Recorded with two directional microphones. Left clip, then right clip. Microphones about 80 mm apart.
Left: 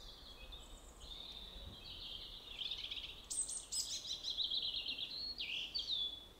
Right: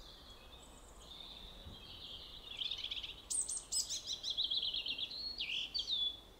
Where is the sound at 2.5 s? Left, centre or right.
Right.